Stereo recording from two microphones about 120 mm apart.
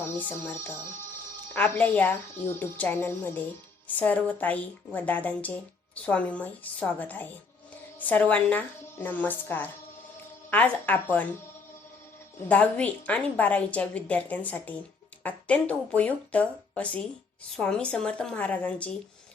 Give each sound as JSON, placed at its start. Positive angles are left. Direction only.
{"t": 0.0, "sound": "a woman's voice", "side_deg": 15}
{"t": 12.5, "sound": "a woman's voice", "side_deg": 10}